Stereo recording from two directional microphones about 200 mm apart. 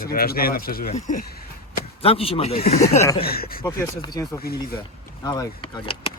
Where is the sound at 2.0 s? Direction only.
30° left (ahead or behind).